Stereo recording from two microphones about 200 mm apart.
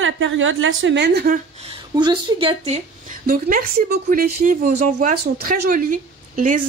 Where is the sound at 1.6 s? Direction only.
25° right (ahead or behind).